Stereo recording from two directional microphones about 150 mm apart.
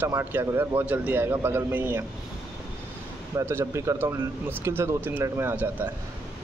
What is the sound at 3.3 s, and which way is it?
A man's voice, 15° right (ahead or behind).